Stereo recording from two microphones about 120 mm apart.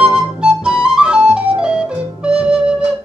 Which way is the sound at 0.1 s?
10° right (ahead or behind).